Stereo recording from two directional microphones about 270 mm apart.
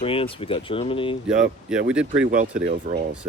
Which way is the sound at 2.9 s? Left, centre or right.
Right.